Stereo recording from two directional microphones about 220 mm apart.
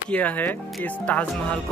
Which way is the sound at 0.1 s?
5° left (ahead or behind).